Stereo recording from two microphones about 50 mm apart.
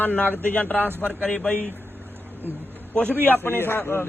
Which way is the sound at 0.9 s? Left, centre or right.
Right.